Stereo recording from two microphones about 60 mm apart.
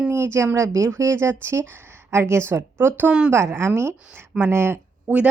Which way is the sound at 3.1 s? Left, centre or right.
Centre.